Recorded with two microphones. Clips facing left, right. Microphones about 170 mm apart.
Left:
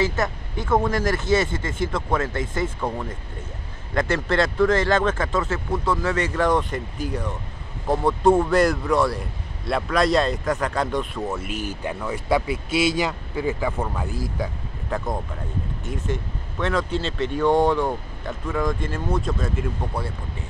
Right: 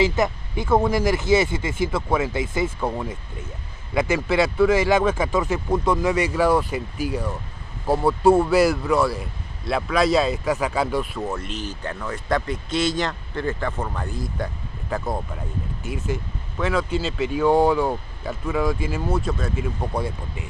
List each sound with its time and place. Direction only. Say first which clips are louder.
0.0 s speech: right 3 dB; 10° right (ahead or behind)
19.9 s speech: right 3 dB; 15° right (ahead or behind)